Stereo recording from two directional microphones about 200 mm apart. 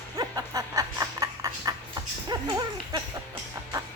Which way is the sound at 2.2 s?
20° right (ahead or behind).